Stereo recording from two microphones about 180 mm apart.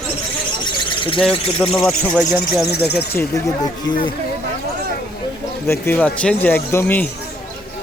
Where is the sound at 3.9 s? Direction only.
90° left.